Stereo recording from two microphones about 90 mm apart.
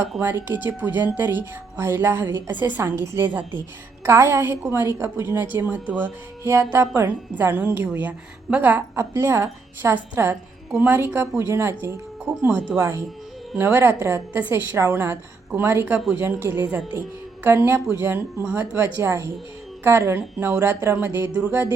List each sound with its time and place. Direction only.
0.2 s speech: 25° right (ahead or behind)